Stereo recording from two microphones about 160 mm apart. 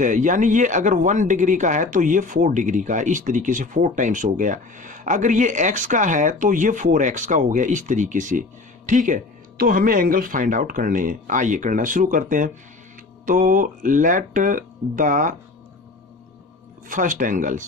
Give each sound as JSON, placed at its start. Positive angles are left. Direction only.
{"t": 0.0, "sound": "speech", "side_deg": -50}
{"t": 16.9, "sound": "speech", "side_deg": -55}